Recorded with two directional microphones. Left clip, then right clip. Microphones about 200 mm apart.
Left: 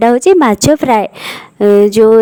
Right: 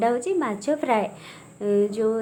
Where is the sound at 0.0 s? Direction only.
60° left (ahead or behind).